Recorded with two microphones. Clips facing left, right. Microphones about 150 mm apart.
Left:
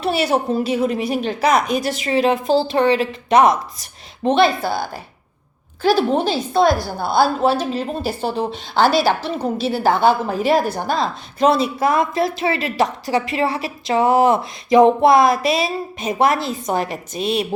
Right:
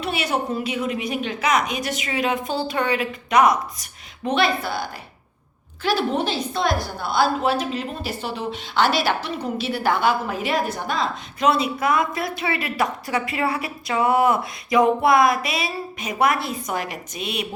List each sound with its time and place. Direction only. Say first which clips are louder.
0.0 s a woman's voice: left 6 dB; 35° left (ahead or behind)